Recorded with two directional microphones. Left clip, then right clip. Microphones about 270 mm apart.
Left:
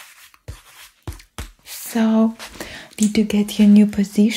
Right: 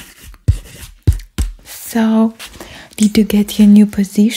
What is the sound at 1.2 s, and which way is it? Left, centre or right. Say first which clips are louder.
Music: right 7 dB; centre.